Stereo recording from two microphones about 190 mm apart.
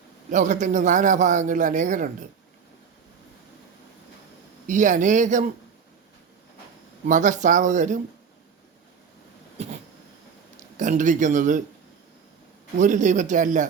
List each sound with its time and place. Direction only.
0.3 s a man's voice: 40° right (ahead or behind)
4.6 s a man's voice: 40° right (ahead or behind)
7.1 s a man's voice: 40° right (ahead or behind)
10.8 s a man's voice: 40° right (ahead or behind)
12.8 s a man's voice: 40° right (ahead or behind)